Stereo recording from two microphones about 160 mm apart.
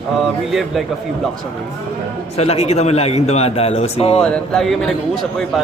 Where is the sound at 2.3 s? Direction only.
40° left (ahead or behind).